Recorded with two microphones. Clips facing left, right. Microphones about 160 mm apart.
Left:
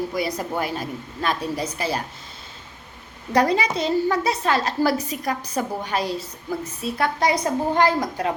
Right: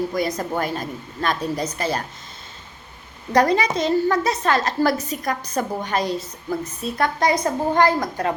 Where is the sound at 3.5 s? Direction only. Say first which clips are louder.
Right 2 dB; 40° right (ahead or behind).